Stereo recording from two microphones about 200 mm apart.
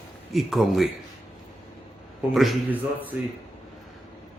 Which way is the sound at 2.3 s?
Centre (ahead or behind).